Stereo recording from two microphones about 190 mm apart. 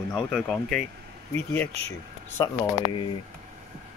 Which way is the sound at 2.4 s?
20° left (ahead or behind).